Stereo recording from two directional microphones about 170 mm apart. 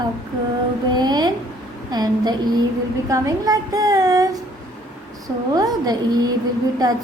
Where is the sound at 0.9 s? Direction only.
25° right (ahead or behind).